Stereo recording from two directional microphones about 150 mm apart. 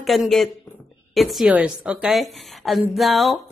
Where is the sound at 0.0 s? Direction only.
Centre (ahead or behind).